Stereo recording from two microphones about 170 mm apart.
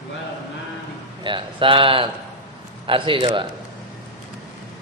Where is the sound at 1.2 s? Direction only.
30° right (ahead or behind).